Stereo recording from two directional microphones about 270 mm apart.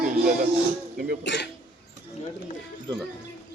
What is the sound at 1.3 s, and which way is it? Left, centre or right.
Speech, left.